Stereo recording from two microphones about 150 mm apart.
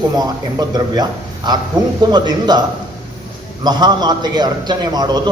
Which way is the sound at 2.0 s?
30° right (ahead or behind).